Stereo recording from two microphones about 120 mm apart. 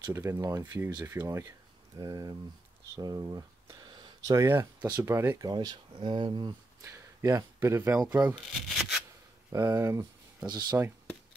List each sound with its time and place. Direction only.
0.0 s speech: 20° right (ahead or behind)
4.7 s speech: 35° right (ahead or behind)
5.4 s speech: 35° right (ahead or behind)
6.8 s speech: 25° right (ahead or behind)
8.6 s rub: centre (ahead or behind)
9.5 s speech: 25° right (ahead or behind)